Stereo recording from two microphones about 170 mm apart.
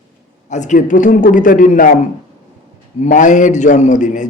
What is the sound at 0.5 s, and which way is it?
A man's voice, 45° left (ahead or behind).